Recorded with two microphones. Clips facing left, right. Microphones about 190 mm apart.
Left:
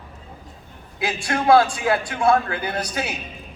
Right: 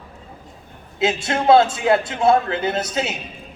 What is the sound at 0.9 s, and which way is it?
A man's voice, 25° right (ahead or behind).